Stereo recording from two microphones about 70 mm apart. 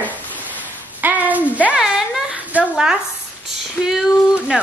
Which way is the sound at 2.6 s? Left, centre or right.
Right.